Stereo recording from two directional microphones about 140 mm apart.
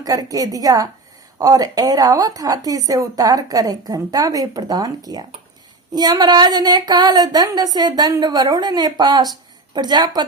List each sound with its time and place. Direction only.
0.0 s a woman's voice: 25° right (ahead or behind)